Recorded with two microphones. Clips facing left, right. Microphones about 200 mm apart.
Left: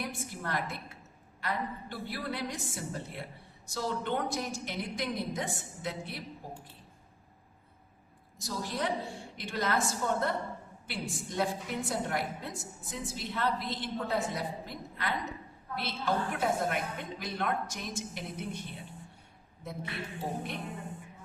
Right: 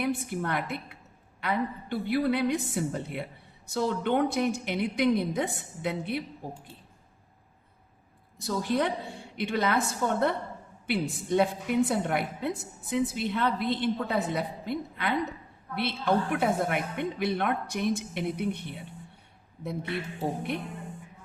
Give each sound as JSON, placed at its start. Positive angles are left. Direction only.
{"t": 0.0, "sound": "a woman's voice", "side_deg": -60}
{"t": 8.4, "sound": "a woman's voice", "side_deg": -60}